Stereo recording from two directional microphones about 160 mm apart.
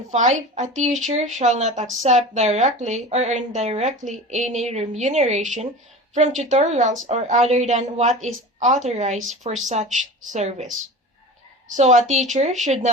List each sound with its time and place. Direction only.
0.1 s a woman's voice: 50° right (ahead or behind)
11.8 s a woman's voice: 45° right (ahead or behind)